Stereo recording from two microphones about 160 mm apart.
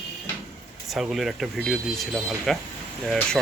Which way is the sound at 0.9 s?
Centre (ahead or behind).